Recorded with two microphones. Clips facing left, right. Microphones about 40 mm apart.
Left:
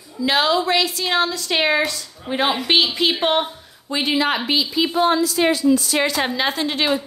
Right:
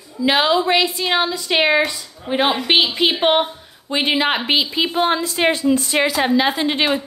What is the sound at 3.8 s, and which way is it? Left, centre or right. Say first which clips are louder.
A woman's voice: right 2 dB; right.